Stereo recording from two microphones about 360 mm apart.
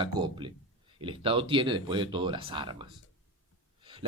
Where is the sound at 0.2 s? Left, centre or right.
Centre.